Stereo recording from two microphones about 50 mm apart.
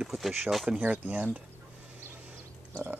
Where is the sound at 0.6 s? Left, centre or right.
Right.